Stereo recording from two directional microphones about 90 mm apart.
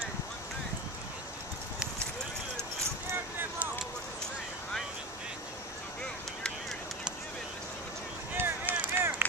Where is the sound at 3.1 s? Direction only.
25° right (ahead or behind).